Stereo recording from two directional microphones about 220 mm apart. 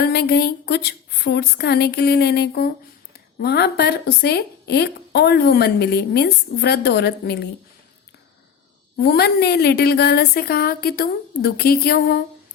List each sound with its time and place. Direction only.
0.0 s speech: 45° left (ahead or behind)
9.0 s speech: 45° left (ahead or behind)